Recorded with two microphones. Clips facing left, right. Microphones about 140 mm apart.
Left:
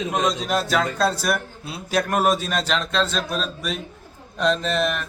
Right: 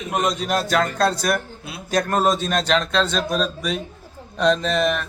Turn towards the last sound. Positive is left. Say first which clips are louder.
# right 2 dB
turn(degrees=0)  # may be behind; listen again after turning